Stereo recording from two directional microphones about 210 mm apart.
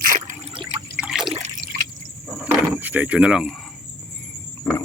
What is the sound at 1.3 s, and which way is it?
Water, 30° right (ahead or behind).